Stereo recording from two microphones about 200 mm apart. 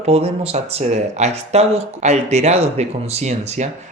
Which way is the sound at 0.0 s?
30° right (ahead or behind).